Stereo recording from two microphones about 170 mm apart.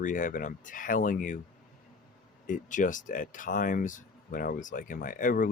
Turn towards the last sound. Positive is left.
turn(degrees=50)  # may be behind; listen again after turning